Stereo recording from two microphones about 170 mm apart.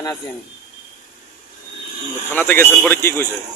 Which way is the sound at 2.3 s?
10° left (ahead or behind).